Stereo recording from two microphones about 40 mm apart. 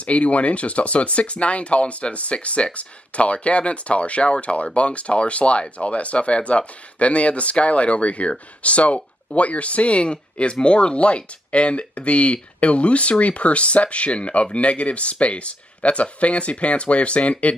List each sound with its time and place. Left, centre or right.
0.0 s speech: left